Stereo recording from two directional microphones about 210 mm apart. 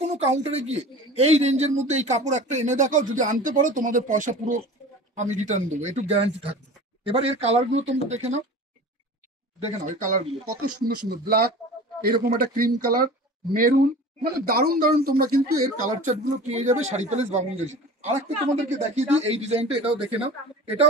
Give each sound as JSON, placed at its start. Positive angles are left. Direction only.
{"t": 0.0, "sound": "speech", "side_deg": -30}
{"t": 9.6, "sound": "speech", "side_deg": -35}
{"t": 11.1, "sound": "speech", "side_deg": -45}